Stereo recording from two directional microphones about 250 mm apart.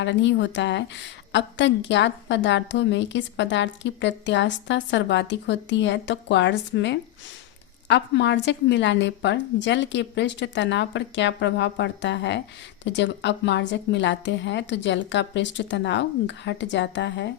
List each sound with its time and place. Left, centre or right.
0.0 s a woman's voice: left